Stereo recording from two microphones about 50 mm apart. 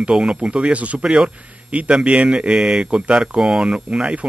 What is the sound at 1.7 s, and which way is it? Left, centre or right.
Speech, right.